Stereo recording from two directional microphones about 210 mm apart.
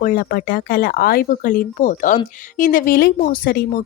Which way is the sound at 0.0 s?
45° left (ahead or behind).